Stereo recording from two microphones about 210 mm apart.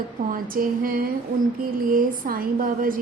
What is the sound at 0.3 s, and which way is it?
A woman's voice, 40° right (ahead or behind).